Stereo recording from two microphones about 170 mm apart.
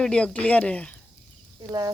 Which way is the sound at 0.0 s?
5° left (ahead or behind).